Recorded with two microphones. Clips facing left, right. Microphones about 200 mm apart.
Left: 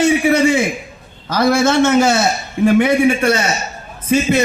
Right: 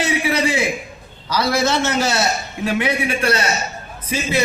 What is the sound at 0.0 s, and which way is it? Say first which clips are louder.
A man's voice: left 7 dB; 50° left (ahead or behind).